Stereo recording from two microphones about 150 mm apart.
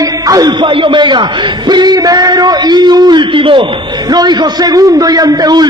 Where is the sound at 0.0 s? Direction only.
25° right (ahead or behind).